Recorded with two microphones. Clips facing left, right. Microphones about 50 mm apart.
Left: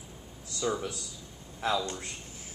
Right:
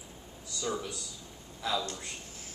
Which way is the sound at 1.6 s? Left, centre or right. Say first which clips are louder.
Left 3 dB; left.